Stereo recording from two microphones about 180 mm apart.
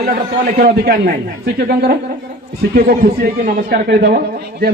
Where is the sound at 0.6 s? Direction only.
55° right (ahead or behind).